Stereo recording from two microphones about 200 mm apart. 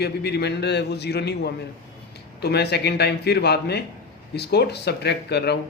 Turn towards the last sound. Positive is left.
turn(degrees=55)  # may be behind; listen again after turning